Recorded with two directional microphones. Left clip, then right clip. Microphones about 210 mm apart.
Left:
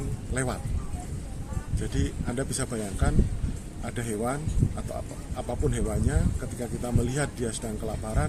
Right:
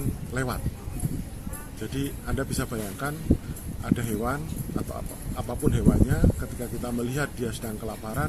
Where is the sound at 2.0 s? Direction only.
15° left (ahead or behind).